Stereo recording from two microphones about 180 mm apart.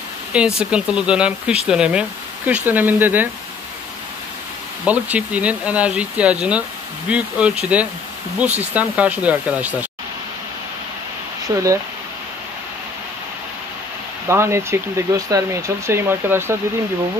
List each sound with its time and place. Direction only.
0.6 s speech: 5° right (ahead or behind)
4.8 s speech: 10° right (ahead or behind)
11.4 s speech: 15° right (ahead or behind)
14.2 s speech: 15° right (ahead or behind)